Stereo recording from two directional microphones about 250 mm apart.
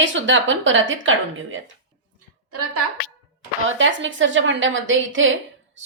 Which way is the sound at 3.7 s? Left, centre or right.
Right.